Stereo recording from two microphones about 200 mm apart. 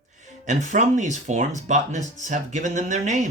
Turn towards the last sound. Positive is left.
turn(degrees=-40)  # may be behind; listen again after turning